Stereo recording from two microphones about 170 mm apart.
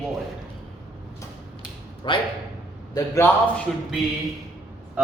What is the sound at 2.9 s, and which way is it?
Speech, 15° left (ahead or behind).